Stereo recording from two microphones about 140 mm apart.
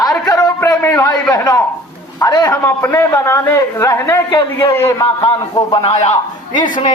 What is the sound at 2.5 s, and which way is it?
A man's voice, 15° left (ahead or behind).